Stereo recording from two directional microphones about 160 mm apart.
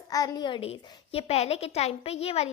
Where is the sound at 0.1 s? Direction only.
25° left (ahead or behind).